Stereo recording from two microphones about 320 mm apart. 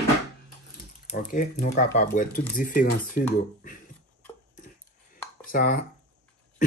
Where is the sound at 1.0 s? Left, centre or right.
Left.